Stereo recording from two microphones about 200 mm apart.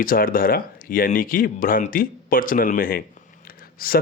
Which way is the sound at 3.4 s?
45° left (ahead or behind).